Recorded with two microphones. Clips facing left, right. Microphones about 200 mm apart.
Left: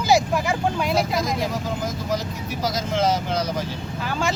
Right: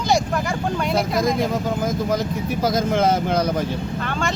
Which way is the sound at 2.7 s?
55° right (ahead or behind).